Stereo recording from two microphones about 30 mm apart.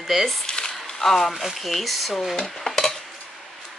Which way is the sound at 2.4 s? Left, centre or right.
Centre.